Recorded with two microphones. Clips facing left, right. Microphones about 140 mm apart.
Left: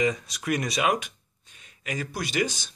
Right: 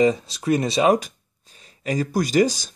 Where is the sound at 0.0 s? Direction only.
30° right (ahead or behind).